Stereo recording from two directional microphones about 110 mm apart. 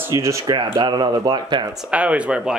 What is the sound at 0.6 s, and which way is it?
Speech, 40° right (ahead or behind).